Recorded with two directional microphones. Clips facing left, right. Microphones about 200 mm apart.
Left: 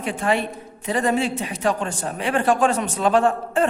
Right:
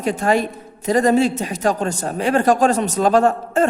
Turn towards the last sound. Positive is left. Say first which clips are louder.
# right 3 dB
turn(degrees=-40)  # may be behind; listen again after turning